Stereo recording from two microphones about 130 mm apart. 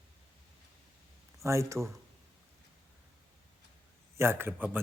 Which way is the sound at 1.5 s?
20° right (ahead or behind).